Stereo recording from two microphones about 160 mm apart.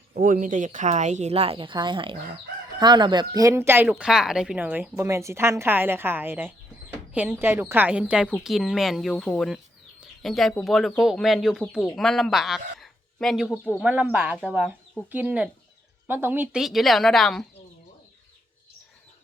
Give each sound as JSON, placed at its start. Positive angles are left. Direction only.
{"t": 0.1, "sound": "a woman's voice", "side_deg": -55}